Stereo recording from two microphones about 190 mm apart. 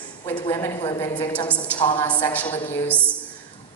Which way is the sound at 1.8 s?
25° left (ahead or behind).